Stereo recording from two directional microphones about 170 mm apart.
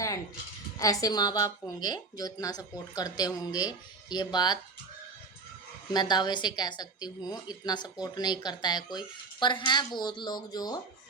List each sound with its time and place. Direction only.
0.8 s speech: 20° left (ahead or behind)
5.9 s speech: 25° left (ahead or behind)